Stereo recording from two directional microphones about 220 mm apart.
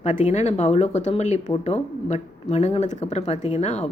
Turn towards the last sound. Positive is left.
turn(degrees=30)  # may be behind; listen again after turning